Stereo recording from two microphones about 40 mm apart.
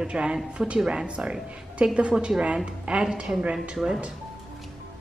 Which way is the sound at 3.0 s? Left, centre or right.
Right.